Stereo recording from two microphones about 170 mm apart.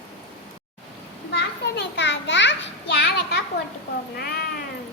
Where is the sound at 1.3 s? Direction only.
90° left.